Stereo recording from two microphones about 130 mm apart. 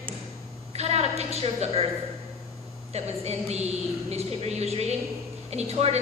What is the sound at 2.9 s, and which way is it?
A woman's voice, 55° right (ahead or behind).